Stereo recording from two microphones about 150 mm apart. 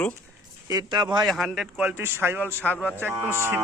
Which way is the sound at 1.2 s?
Centre (ahead or behind).